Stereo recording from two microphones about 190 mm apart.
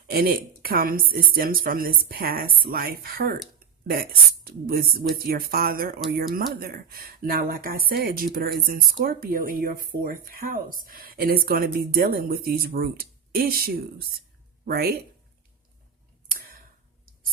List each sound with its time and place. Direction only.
0.1 s a woman's voice: 50° right (ahead or behind)